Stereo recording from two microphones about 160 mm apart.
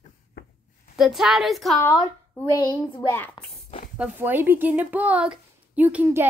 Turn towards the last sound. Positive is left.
turn(degrees=-10)  # may be behind; listen again after turning